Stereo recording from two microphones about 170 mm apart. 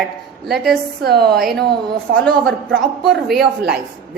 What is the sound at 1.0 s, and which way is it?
Speech, 65° right (ahead or behind).